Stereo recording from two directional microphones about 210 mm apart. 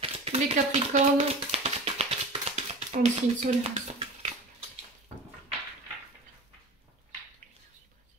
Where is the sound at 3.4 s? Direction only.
30° right (ahead or behind).